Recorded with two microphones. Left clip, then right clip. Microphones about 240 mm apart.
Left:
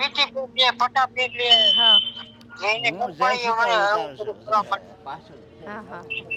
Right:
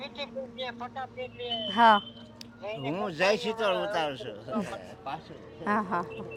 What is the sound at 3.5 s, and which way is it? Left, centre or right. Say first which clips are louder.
Speech: left 9 dB; left.